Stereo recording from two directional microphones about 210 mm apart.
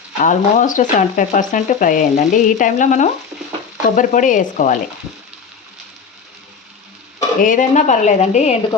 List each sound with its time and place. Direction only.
0.2 s speech: 40° left (ahead or behind)
7.2 s speech: 35° left (ahead or behind)